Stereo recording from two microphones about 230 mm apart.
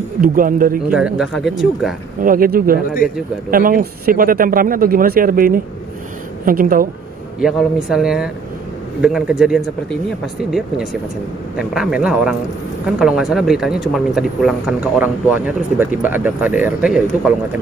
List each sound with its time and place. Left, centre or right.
0.2 s speech: right
0.8 s speech: centre
2.2 s speech: right
7.3 s speech: centre